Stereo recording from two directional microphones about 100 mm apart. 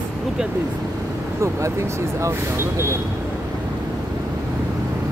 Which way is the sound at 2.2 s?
25° right (ahead or behind).